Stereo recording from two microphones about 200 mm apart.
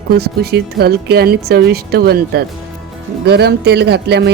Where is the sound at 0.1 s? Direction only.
50° right (ahead or behind).